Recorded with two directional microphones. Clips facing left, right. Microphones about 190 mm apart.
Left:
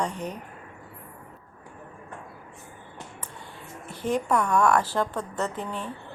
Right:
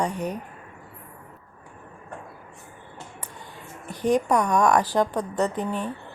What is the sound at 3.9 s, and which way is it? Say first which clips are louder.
A woman's voice: right 4 dB; 15° right (ahead or behind).